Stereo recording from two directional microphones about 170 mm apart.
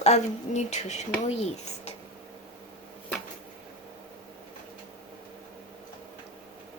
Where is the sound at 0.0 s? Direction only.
40° left (ahead or behind).